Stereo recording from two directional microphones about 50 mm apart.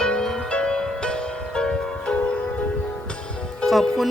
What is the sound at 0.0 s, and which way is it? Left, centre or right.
Music, centre.